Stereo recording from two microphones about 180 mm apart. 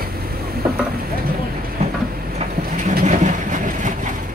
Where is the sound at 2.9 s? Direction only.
45° right (ahead or behind).